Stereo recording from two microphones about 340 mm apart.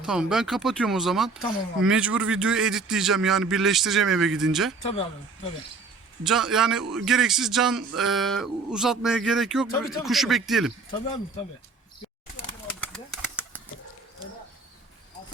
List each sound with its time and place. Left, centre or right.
0.0 s speech: centre
6.2 s speech: centre
11.0 s speech: centre
12.8 s a sound: centre